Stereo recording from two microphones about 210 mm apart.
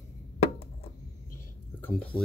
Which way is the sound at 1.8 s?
5° left (ahead or behind).